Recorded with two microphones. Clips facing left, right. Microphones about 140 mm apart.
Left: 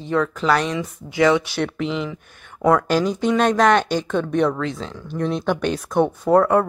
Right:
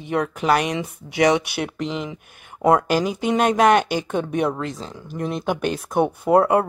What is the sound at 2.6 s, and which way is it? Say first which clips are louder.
Speech: even; 25° right (ahead or behind).